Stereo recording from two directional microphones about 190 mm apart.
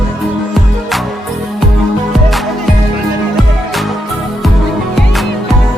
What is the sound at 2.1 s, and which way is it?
Music, centre (ahead or behind).